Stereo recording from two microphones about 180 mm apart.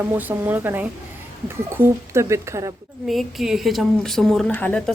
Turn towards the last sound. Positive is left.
turn(degrees=5)  # may be behind; listen again after turning